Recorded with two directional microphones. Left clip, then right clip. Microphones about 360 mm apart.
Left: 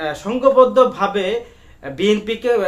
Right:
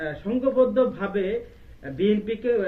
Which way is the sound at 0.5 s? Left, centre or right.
Left.